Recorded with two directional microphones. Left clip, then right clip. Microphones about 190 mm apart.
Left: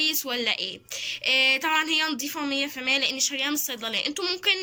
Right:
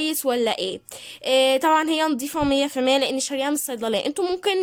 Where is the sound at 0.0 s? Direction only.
45° right (ahead or behind).